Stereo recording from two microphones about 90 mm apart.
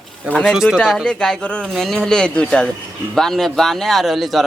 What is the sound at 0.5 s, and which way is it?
Speech, 5° right (ahead or behind).